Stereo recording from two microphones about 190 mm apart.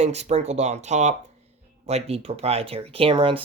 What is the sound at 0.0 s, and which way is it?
Speech, 35° right (ahead or behind).